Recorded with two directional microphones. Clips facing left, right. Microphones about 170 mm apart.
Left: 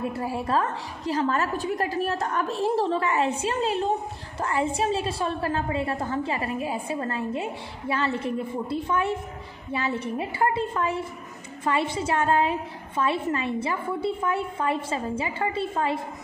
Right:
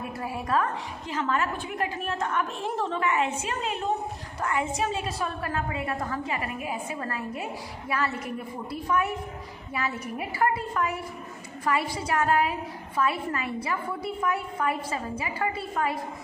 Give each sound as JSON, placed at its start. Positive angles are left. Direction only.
{"t": 0.0, "sound": "a woman's voice", "side_deg": 30}